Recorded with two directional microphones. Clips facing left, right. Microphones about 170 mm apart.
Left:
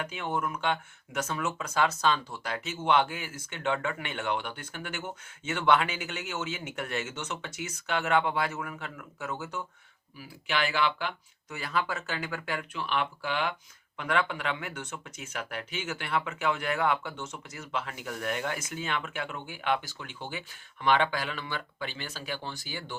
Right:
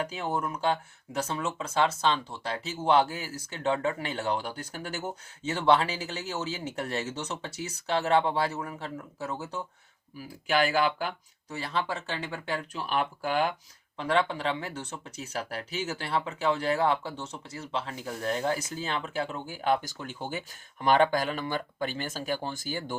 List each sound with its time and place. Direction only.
0.0 s speech: 35° right (ahead or behind)
10.2 s speech: 45° right (ahead or behind)
13.9 s speech: 30° right (ahead or behind)